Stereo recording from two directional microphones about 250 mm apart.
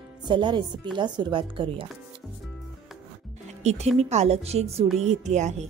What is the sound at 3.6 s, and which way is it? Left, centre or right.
Speech, right.